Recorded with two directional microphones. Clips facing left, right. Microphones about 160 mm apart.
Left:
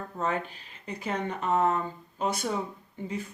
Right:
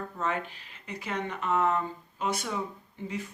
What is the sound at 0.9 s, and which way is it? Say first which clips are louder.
Speech: left 2 dB; 35° left (ahead or behind).